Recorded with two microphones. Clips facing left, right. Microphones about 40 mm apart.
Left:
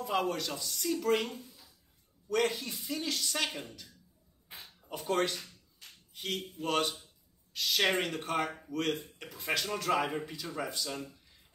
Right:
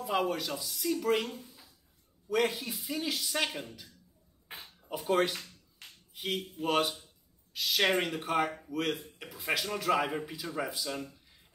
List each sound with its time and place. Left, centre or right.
0.0 s speech: centre
4.5 s a sound: right
4.8 s speech: centre